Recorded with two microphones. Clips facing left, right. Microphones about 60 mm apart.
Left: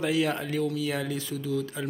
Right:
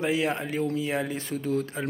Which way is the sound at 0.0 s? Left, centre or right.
Right.